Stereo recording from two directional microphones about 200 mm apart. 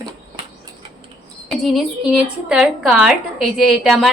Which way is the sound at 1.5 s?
Centre (ahead or behind).